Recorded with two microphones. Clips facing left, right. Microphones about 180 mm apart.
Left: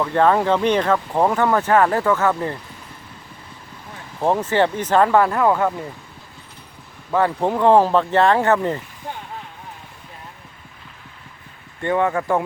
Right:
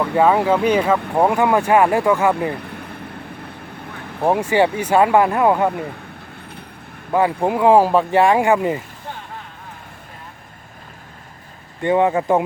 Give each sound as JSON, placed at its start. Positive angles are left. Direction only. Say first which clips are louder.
{"t": 0.0, "sound": "speech", "louder": "right 1 dB", "side_deg": -10}
{"t": 2.6, "sound": "a sound", "louder": "right 9 dB", "side_deg": -60}
{"t": 4.2, "sound": "speech", "louder": "right 2 dB", "side_deg": -10}
{"t": 7.1, "sound": "speech", "louder": "right 2 dB", "side_deg": -10}
{"t": 11.8, "sound": "speech", "louder": "right 3 dB", "side_deg": -15}